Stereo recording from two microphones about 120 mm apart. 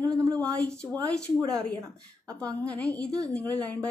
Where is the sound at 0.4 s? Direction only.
5° left (ahead or behind).